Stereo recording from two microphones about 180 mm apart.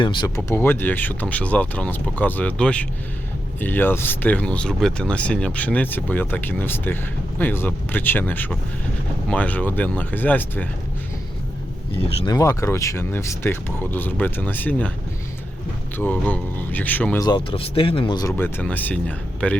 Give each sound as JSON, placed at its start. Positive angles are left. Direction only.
{"t": 0.0, "sound": "speech", "side_deg": 25}
{"t": 0.3, "sound": "speech", "side_deg": 15}
{"t": 12.0, "sound": "speech", "side_deg": 25}
{"t": 16.0, "sound": "speech", "side_deg": 10}
{"t": 17.2, "sound": "speech", "side_deg": 25}